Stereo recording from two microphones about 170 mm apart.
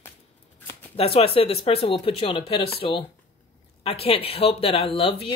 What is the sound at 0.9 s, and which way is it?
Speech, 35° left (ahead or behind).